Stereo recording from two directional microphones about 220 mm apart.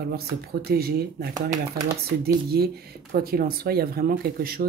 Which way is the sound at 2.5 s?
45° right (ahead or behind).